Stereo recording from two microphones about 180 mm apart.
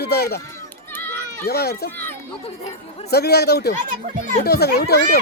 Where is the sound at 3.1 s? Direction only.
65° left (ahead or behind).